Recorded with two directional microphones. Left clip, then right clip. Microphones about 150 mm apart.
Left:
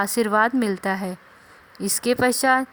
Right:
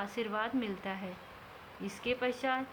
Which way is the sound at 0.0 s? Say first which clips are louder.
Left 16 dB; 85° left.